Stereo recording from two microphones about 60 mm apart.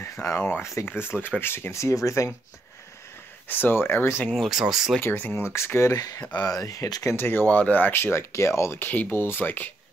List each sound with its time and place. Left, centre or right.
0.0 s a sound: left
0.6 s speech: left
0.8 s speech: left
3.4 s speech: left
4.5 s speech: centre
5.0 s speech: left
5.4 s speech: left
5.9 s speech: left
6.4 s speech: left
7.2 s speech: left
7.4 s speech: left
8.7 s speech: left